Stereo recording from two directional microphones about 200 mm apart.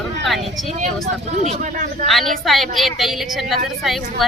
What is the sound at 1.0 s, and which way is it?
Speech, 35° right (ahead or behind).